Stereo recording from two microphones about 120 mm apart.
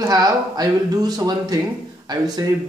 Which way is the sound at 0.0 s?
30° right (ahead or behind).